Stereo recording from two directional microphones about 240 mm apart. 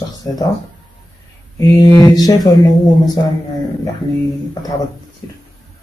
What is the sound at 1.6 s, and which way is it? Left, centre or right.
Speech, centre.